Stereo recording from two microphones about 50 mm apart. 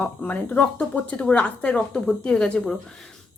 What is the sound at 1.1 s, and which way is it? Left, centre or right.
Speech, left.